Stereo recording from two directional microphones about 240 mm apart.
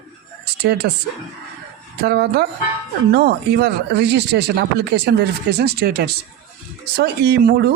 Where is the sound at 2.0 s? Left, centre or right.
Right.